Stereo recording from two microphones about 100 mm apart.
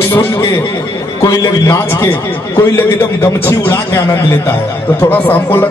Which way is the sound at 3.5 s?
25° left (ahead or behind).